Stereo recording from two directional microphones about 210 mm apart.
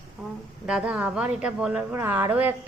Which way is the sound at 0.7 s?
5° right (ahead or behind).